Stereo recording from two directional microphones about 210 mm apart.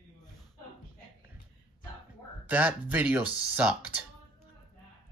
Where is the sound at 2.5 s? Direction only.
5° right (ahead or behind).